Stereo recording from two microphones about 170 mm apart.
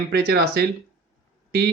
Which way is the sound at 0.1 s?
70° right (ahead or behind).